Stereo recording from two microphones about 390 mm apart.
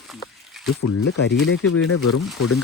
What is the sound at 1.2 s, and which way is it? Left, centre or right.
Speech, left.